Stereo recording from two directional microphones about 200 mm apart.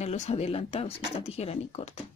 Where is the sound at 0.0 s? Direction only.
35° left (ahead or behind).